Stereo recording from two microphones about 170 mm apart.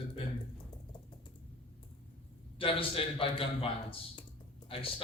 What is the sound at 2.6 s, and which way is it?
Speech, 30° left (ahead or behind).